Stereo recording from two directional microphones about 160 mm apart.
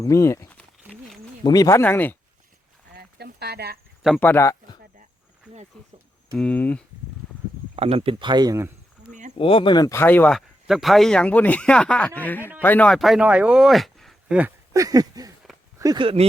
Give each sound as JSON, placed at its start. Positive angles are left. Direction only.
{"t": 0.0, "sound": "a sound", "side_deg": 20}
{"t": 1.5, "sound": "speech", "side_deg": 20}
{"t": 2.9, "sound": "a sound", "side_deg": -85}
{"t": 4.2, "sound": "speech", "side_deg": 15}
{"t": 5.7, "sound": "speech", "side_deg": 5}
{"t": 7.8, "sound": "speech", "side_deg": -35}
{"t": 9.4, "sound": "speech", "side_deg": 35}
{"t": 10.3, "sound": "speech", "side_deg": 0}
{"t": 14.3, "sound": "speech", "side_deg": -15}